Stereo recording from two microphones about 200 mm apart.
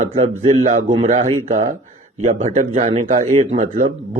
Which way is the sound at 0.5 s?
40° right (ahead or behind).